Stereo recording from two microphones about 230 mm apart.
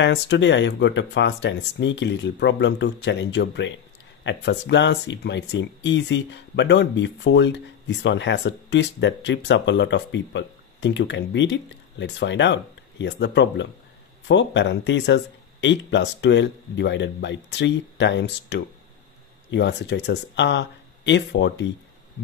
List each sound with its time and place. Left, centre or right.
0.0 s speech: left